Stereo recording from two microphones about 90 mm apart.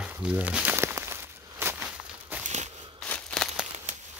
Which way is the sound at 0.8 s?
30° right (ahead or behind).